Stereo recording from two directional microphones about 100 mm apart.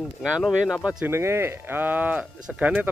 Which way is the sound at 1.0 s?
25° right (ahead or behind).